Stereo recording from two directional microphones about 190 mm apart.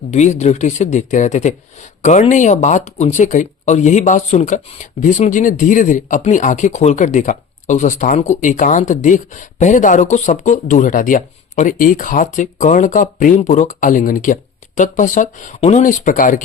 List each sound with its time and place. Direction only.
0.1 s speech: 35° left (ahead or behind)